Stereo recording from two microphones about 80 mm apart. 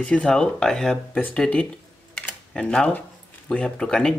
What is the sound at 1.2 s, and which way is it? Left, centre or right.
Camera, centre.